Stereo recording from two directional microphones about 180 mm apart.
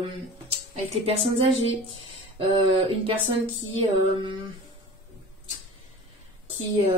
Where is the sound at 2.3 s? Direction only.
30° right (ahead or behind).